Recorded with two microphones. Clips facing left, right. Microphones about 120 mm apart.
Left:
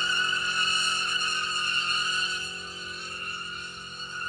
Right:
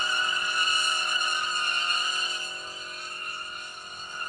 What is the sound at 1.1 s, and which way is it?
Vehicle, 55° right (ahead or behind).